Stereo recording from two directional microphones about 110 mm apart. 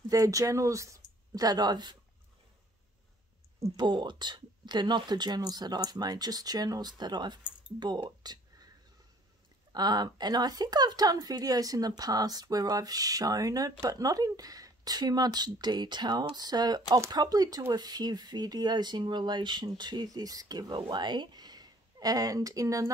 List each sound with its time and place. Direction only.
0.1 s a woman's voice: 30° right (ahead or behind)
3.7 s a woman's voice: 40° right (ahead or behind)
9.7 s a woman's voice: 40° right (ahead or behind)